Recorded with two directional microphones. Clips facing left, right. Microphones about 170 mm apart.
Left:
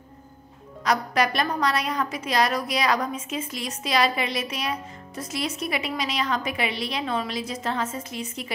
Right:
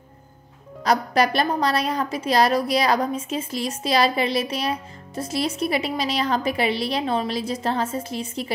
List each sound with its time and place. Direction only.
0.8 s a woman's voice: 35° right (ahead or behind)